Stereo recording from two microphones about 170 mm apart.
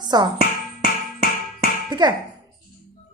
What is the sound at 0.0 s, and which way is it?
Music, 25° right (ahead or behind).